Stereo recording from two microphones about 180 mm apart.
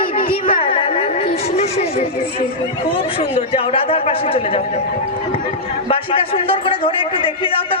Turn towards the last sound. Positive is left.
turn(degrees=30)  # may be behind; listen again after turning